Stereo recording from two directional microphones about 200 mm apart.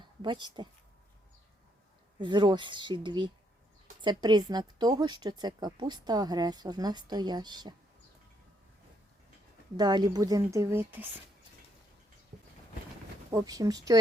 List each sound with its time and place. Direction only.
0.0 s speech: 25° right (ahead or behind)
2.1 s a woman's voice: 25° right (ahead or behind)
9.7 s speech: 20° right (ahead or behind)
13.3 s a woman's voice: 20° right (ahead or behind)